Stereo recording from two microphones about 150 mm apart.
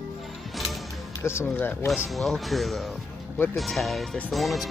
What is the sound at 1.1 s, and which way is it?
Speech, 15° left (ahead or behind).